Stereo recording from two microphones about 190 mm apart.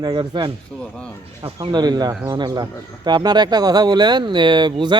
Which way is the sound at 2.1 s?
10° right (ahead or behind).